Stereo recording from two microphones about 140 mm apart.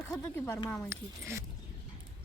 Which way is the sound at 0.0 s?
20° left (ahead or behind).